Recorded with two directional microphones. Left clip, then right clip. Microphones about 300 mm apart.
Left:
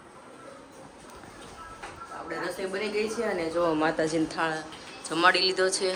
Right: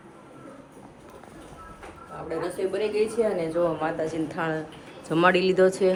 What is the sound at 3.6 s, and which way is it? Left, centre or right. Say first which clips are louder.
Speech: left 3 dB; left.